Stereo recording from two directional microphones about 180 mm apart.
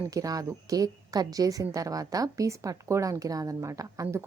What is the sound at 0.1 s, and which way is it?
A woman's voice, 20° right (ahead or behind).